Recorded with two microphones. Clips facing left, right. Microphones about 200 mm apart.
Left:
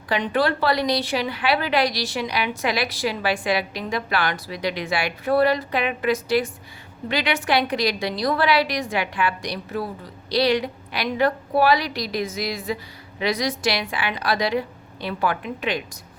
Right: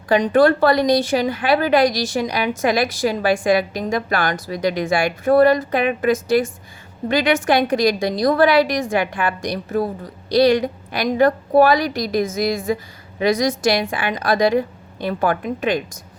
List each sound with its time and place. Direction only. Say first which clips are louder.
0.1 s a woman's voice: right 8 dB; 45° right (ahead or behind)